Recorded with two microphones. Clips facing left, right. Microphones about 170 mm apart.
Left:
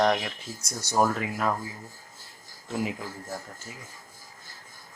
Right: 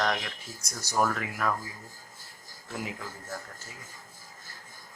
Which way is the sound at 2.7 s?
20° left (ahead or behind).